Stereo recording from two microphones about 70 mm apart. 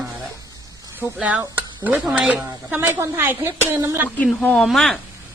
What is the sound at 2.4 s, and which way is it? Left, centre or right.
Speech, right.